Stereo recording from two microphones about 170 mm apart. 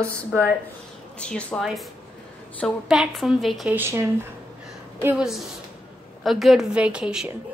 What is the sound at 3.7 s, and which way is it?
A woman's voice, 15° right (ahead or behind).